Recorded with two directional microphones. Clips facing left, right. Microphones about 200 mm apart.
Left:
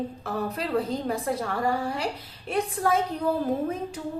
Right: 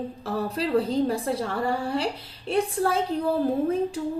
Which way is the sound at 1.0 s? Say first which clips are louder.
Right 2 dB; 30° right (ahead or behind).